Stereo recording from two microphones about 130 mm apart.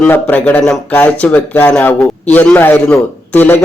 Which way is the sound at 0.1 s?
10° left (ahead or behind).